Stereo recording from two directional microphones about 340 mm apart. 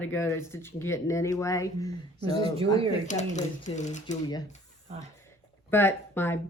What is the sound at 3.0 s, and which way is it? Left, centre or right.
Speech, left.